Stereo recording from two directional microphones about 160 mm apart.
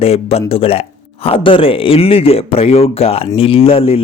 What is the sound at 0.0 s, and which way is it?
Speech, 40° left (ahead or behind).